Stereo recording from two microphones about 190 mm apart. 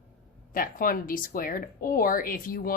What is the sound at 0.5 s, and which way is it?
Speech, 50° left (ahead or behind).